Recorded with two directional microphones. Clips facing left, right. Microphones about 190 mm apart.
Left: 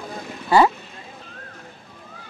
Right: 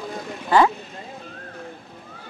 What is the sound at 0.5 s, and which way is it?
Speech, 10° left (ahead or behind).